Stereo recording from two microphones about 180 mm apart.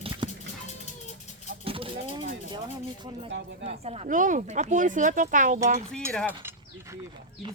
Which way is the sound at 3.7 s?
35° right (ahead or behind).